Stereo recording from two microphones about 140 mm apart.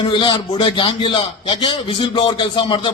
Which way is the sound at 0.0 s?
35° left (ahead or behind).